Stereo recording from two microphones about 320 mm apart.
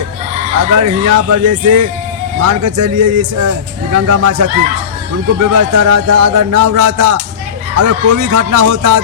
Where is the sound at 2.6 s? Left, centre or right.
Right.